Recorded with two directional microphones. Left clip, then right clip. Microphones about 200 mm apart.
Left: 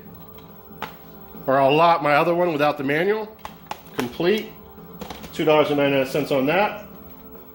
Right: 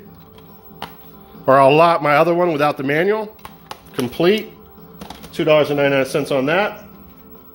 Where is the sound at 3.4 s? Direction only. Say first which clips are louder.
Left 1 dB; 15° right (ahead or behind).